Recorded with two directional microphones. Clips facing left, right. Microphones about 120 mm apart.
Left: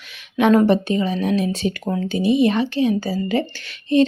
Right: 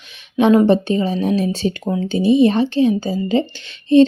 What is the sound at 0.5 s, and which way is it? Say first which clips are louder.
Speech: right 2 dB; 25° right (ahead or behind).